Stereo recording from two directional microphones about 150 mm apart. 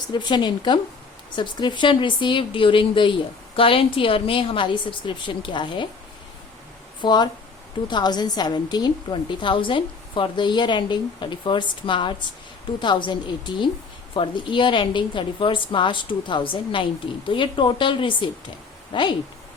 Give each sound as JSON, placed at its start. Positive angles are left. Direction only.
{"t": 0.1, "sound": "speech", "side_deg": 30}
{"t": 7.0, "sound": "speech", "side_deg": 30}